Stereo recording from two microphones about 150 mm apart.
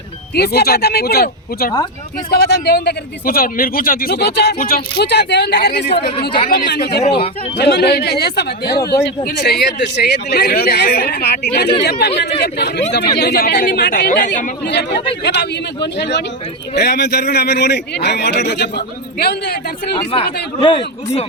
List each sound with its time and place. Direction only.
0.3 s speech: 90° left
7.1 s speech: 40° left (ahead or behind)
7.5 s speech: 90° left
15.3 s speech: 90° left
20.6 s speech: 35° left (ahead or behind)